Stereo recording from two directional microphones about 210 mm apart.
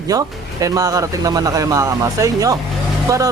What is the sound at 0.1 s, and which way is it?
Speech, 15° right (ahead or behind).